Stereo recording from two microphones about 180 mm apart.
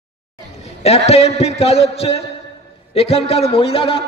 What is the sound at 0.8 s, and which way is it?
A man's voice, 35° left (ahead or behind).